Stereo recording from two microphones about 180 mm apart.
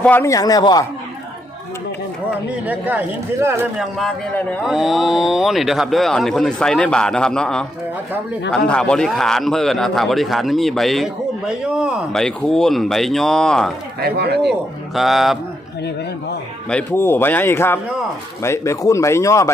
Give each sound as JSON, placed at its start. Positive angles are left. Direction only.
{"t": 0.0, "sound": "a man's voice", "side_deg": 10}
{"t": 2.6, "sound": "speech", "side_deg": -10}
{"t": 3.8, "sound": "a man's voice", "side_deg": 0}
{"t": 14.0, "sound": "speech", "side_deg": -60}
{"t": 14.9, "sound": "a man's voice", "side_deg": 0}
{"t": 16.6, "sound": "speech", "side_deg": 10}